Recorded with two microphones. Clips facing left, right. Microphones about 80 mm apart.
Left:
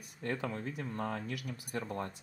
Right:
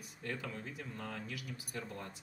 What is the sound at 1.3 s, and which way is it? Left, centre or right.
Speech, left.